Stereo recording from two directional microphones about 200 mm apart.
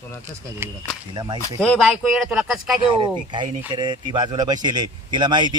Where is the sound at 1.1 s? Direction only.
20° right (ahead or behind).